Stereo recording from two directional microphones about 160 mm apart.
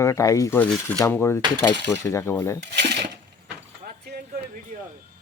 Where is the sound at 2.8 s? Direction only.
90° right.